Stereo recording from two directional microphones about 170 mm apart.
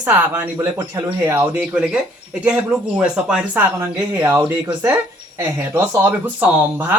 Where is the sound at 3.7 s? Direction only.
15° right (ahead or behind).